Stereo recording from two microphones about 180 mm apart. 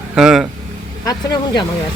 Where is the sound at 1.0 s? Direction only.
20° left (ahead or behind).